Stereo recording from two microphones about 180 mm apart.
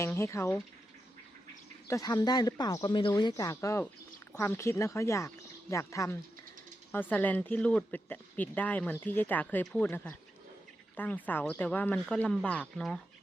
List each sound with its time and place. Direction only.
0.0 s speech: 15° left (ahead or behind)
1.9 s speech: 20° left (ahead or behind); by 13.0 s centre (ahead or behind)